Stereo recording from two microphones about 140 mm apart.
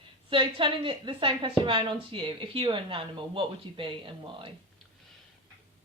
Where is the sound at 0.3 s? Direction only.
40° right (ahead or behind).